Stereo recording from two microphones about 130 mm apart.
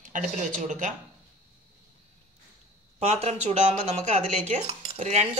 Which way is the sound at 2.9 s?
55° right (ahead or behind).